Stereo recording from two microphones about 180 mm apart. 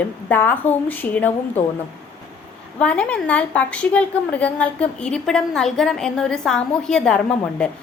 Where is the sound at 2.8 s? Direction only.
5° left (ahead or behind).